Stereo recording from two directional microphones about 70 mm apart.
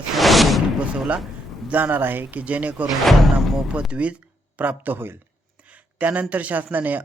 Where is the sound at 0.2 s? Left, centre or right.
Centre.